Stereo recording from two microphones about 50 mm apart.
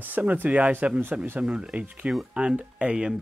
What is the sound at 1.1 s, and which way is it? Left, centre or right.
Speech, centre.